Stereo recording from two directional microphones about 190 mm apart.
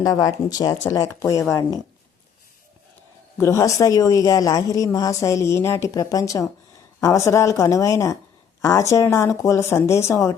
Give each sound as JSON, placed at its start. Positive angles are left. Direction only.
{"t": 0.0, "sound": "speech", "side_deg": 20}
{"t": 3.3, "sound": "speech", "side_deg": 15}